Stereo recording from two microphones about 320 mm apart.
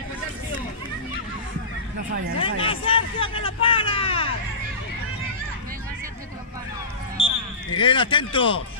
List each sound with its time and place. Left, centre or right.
2.3 s speech: centre
7.7 s speech: centre